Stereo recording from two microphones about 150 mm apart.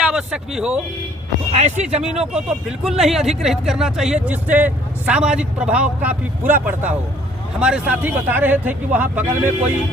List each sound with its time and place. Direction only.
0.1 s speech: 5° right (ahead or behind)
1.5 s speech: 50° right (ahead or behind)
2.1 s speech: 5° right (ahead or behind)